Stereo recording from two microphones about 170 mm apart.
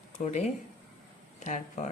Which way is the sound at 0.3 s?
40° left (ahead or behind).